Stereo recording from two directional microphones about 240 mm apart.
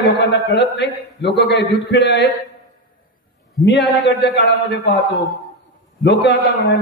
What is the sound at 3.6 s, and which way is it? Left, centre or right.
A man's voice, left.